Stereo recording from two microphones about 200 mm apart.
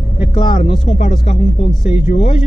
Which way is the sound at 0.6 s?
25° left (ahead or behind).